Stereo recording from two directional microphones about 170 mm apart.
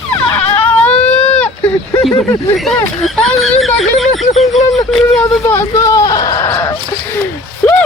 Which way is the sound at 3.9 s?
Centre (ahead or behind).